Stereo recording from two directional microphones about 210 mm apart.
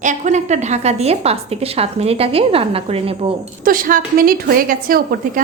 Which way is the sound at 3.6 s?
40° right (ahead or behind).